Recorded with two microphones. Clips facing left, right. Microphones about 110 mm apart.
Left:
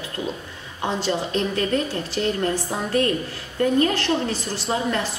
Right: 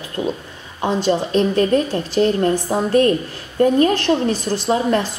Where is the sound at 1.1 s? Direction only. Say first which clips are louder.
Right 8 dB; 35° right (ahead or behind).